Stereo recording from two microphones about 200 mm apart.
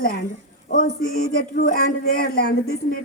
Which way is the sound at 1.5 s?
50° left (ahead or behind).